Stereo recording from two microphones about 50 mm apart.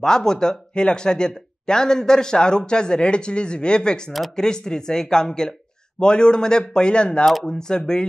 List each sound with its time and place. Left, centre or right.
0.0 s speech: centre